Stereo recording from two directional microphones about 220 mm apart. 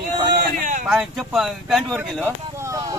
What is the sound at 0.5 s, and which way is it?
Speech, 35° right (ahead or behind).